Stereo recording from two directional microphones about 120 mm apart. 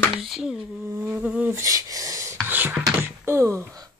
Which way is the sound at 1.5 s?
25° right (ahead or behind).